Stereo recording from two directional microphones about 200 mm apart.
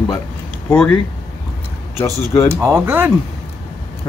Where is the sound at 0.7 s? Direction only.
10° left (ahead or behind).